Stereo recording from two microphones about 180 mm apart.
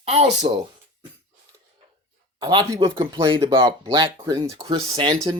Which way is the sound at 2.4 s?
25° right (ahead or behind).